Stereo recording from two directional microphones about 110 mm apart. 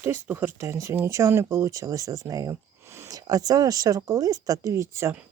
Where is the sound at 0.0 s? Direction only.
20° right (ahead or behind).